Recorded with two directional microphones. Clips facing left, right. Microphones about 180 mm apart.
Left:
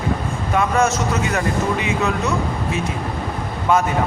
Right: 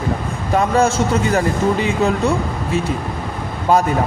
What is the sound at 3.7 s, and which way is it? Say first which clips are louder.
Speech: right 3 dB; 35° right (ahead or behind).